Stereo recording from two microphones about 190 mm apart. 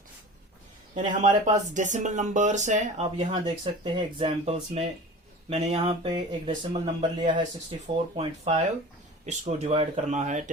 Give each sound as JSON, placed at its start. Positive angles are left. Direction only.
{"t": 1.0, "sound": "speech", "side_deg": -40}
{"t": 3.3, "sound": "speech", "side_deg": -25}